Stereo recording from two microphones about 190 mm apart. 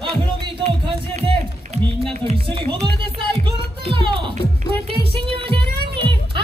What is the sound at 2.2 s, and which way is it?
Music, 30° right (ahead or behind).